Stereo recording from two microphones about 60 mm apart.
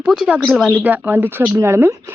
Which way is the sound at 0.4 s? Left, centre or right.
Centre.